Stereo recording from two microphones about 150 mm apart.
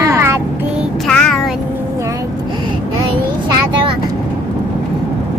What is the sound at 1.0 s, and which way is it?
Music, 5° left (ahead or behind).